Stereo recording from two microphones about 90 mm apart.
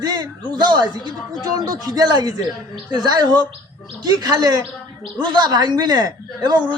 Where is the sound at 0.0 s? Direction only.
50° right (ahead or behind).